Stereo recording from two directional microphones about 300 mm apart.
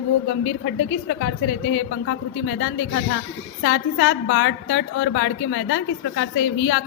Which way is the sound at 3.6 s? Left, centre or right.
Left.